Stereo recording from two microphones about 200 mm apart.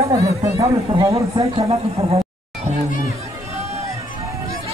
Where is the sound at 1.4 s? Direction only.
30° right (ahead or behind).